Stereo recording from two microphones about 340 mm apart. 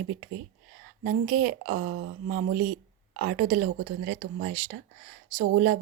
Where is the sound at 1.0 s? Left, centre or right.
Right.